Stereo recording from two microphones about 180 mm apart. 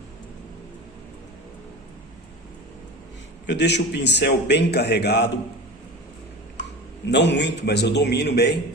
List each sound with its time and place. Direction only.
3.4 s a man's voice: 75° left (ahead or behind)
7.0 s a man's voice: 75° left (ahead or behind)